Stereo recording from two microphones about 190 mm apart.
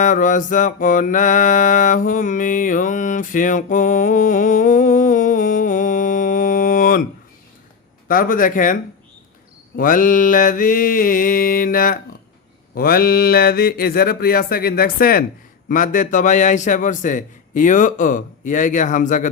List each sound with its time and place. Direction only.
0.0 s mantra: 45° left (ahead or behind)
8.0 s mantra: 45° left (ahead or behind)